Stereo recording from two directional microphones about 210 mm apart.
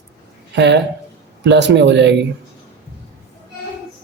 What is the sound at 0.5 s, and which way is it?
Speech, 55° right (ahead or behind).